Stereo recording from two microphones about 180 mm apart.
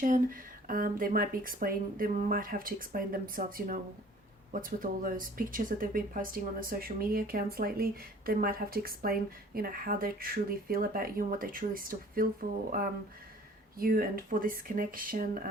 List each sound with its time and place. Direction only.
0.0 s speech: 50° right (ahead or behind)